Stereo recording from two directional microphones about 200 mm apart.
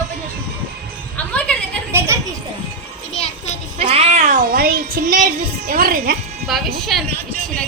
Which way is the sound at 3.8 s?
30° right (ahead or behind).